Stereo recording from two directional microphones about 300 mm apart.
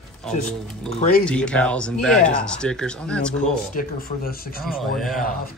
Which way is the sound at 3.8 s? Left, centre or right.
Left.